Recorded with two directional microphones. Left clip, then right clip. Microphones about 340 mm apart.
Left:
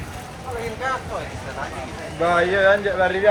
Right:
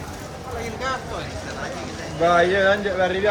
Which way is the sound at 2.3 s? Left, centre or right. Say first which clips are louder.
Left 1 dB; left.